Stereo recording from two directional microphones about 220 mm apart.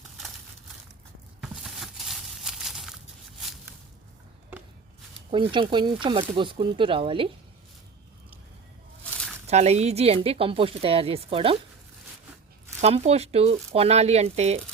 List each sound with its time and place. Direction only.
1.4 s a sound: centre (ahead or behind)
5.3 s speech: 20° right (ahead or behind)
9.5 s speech: 30° right (ahead or behind)
12.8 s speech: 30° right (ahead or behind)